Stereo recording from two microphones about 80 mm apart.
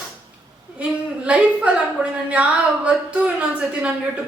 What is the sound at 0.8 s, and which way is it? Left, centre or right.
A woman's voice, centre.